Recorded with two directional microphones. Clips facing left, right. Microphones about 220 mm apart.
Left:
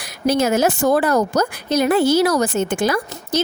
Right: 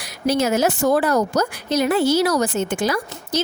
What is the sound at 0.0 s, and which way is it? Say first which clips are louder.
A woman's voice: left 2 dB; 50° left (ahead or behind).